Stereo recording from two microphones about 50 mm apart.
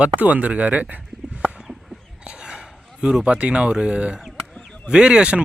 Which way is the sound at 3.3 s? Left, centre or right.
Right.